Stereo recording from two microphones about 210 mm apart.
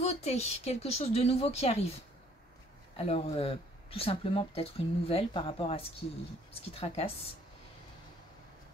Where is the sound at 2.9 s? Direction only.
30° left (ahead or behind).